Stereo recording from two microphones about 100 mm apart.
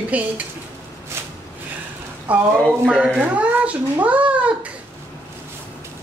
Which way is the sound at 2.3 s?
15° right (ahead or behind).